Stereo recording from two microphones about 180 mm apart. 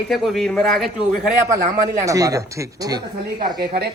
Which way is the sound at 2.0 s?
20° right (ahead or behind).